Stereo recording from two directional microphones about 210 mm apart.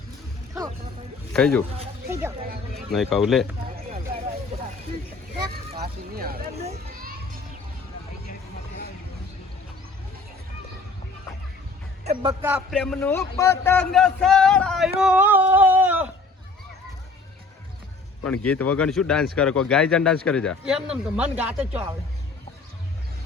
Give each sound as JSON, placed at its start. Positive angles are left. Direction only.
{"t": 1.3, "sound": "speech", "side_deg": 5}
{"t": 2.0, "sound": "speech", "side_deg": -10}
{"t": 2.4, "sound": "speech", "side_deg": -45}
{"t": 2.9, "sound": "speech", "side_deg": 0}
{"t": 5.3, "sound": "vehicle", "side_deg": -30}
{"t": 5.8, "sound": "speech", "side_deg": -45}
{"t": 6.9, "sound": "children playing", "side_deg": -40}
{"t": 12.3, "sound": "speech", "side_deg": -10}
{"t": 12.7, "sound": "a man's voice", "side_deg": 5}
{"t": 18.3, "sound": "speech", "side_deg": 5}